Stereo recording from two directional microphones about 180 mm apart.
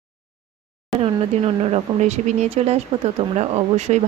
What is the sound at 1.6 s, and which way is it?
Speech, 35° right (ahead or behind).